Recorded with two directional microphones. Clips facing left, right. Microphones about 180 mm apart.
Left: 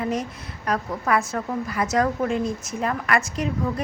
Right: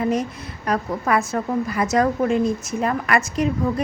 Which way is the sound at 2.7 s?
10° right (ahead or behind).